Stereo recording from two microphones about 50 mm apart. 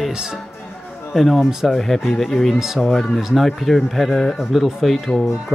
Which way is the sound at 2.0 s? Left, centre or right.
Centre.